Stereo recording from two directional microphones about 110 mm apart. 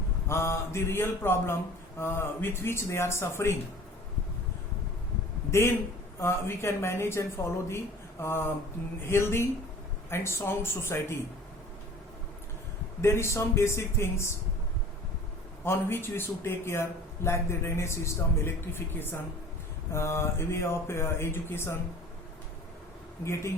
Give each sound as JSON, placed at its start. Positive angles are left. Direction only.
{"t": 0.3, "sound": "a man's voice", "side_deg": 25}
{"t": 5.5, "sound": "a man's voice", "side_deg": 25}
{"t": 13.0, "sound": "a man's voice", "side_deg": 25}
{"t": 15.6, "sound": "a man's voice", "side_deg": 20}
{"t": 23.2, "sound": "a man's voice", "side_deg": 25}